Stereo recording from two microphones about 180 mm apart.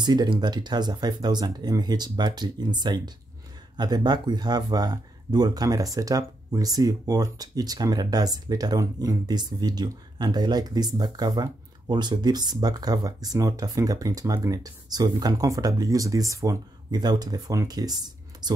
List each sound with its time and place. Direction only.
0.0 s speech: 25° right (ahead or behind)